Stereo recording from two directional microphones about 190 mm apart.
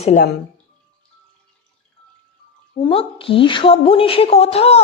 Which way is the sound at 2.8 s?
30° left (ahead or behind).